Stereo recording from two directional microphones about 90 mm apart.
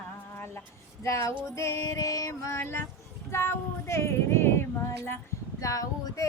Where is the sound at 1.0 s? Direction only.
35° left (ahead or behind).